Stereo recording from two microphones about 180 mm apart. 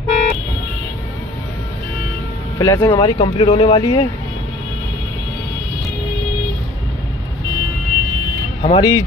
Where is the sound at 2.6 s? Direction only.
20° left (ahead or behind).